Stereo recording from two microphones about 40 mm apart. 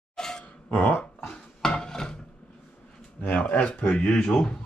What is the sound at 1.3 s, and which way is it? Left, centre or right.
Dishes, centre.